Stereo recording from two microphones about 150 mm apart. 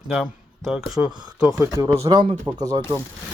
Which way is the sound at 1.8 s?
20° right (ahead or behind).